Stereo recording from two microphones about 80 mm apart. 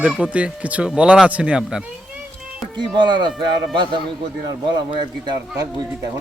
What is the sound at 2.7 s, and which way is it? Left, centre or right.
Speech, right.